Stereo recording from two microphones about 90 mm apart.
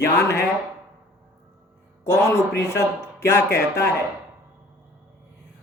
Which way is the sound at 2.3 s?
35° left (ahead or behind).